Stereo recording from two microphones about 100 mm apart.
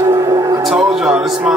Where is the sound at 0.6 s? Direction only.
5° right (ahead or behind).